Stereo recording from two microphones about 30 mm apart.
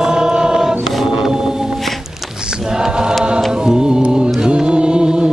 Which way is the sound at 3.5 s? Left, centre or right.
Right.